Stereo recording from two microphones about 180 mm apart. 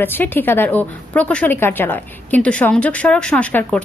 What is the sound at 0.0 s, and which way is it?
A woman's voice, 10° left (ahead or behind).